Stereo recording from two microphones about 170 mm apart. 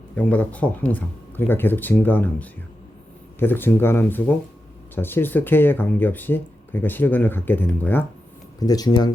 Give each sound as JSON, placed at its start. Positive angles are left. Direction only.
{"t": 0.2, "sound": "speech", "side_deg": 10}
{"t": 8.5, "sound": "speech", "side_deg": 20}